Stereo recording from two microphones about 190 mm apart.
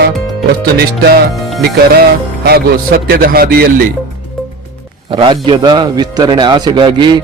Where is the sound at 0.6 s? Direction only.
55° right (ahead or behind).